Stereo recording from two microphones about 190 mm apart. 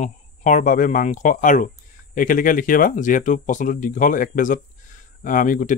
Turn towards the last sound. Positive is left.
turn(degrees=45)  # may be behind; listen again after turning